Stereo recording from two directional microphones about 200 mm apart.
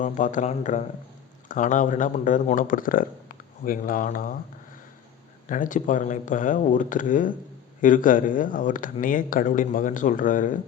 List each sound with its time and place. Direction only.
0.0 s speech: 40° left (ahead or behind)
5.5 s speech: 40° left (ahead or behind)